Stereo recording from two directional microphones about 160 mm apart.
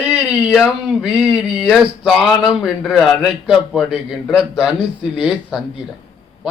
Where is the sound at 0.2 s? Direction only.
5° right (ahead or behind).